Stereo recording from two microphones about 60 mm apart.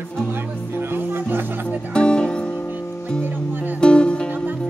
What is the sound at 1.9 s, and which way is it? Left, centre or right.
Music, centre.